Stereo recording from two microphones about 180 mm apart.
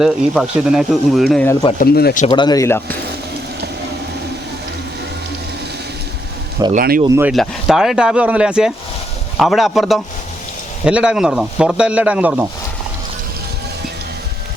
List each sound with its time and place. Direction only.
0.0 s speech: centre (ahead or behind)
1.8 s speech: 60° left (ahead or behind)
2.3 s speech: 25° left (ahead or behind)
6.7 s speech: 55° right (ahead or behind)
7.2 s speech: 5° right (ahead or behind)